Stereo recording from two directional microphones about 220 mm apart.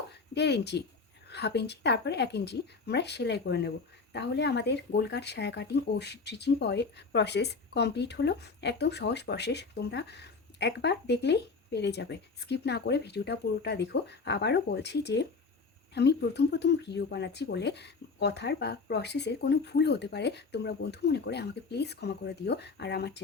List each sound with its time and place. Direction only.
0.3 s speech: 50° left (ahead or behind)